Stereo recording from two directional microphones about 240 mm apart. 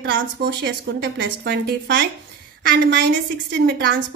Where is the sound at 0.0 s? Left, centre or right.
Right.